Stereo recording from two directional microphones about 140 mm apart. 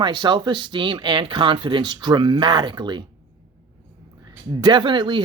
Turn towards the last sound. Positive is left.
turn(degrees=-35)  # may be behind; listen again after turning